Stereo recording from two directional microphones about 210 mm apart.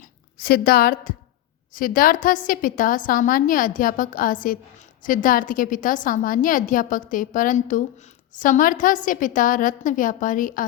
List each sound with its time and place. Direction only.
0.3 s a woman's voice: 45° left (ahead or behind)